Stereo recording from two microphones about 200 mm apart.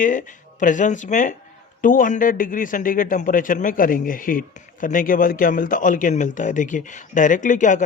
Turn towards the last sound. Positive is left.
turn(degrees=40)  # may be behind; listen again after turning